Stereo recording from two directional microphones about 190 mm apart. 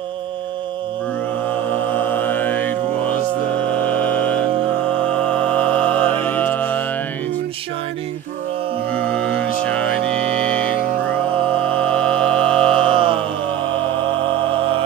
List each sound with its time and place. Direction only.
1.5 s mantra: 10° left (ahead or behind)
8.9 s music: 5° left (ahead or behind)
11.6 s music: 5° left (ahead or behind)
12.9 s mantra: 25° right (ahead or behind)